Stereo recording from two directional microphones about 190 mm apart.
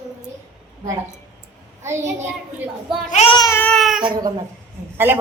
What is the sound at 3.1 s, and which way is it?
Child singing, 35° left (ahead or behind).